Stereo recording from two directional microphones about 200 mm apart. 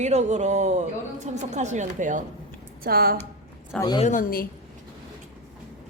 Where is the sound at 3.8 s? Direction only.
20° left (ahead or behind).